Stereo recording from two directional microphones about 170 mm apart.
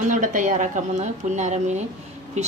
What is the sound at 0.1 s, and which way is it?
A woman's voice, 50° right (ahead or behind).